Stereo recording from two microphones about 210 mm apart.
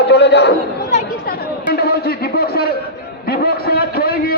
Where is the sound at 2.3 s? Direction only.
50° left (ahead or behind).